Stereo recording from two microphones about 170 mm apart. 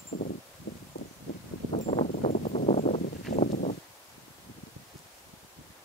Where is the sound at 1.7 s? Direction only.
35° left (ahead or behind).